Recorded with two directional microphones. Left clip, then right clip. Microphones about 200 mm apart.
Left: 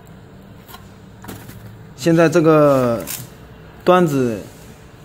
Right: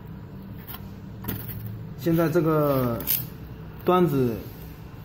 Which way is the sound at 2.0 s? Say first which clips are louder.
Left 10 dB; 65° left (ahead or behind).